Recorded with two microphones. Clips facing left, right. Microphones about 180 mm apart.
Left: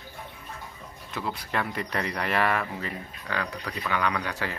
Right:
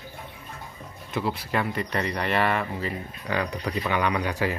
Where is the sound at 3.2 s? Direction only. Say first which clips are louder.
Right 5 dB; 20° right (ahead or behind).